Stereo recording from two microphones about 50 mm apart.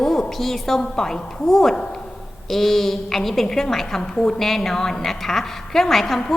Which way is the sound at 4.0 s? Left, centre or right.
Centre.